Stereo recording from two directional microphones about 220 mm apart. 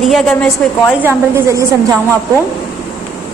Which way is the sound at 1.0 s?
10° right (ahead or behind).